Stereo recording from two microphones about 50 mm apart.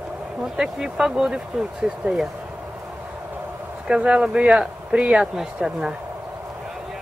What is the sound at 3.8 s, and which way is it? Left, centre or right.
Speech, right.